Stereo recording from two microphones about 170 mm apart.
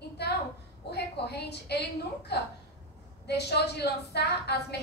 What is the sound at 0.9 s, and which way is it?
A woman's voice, 75° left (ahead or behind).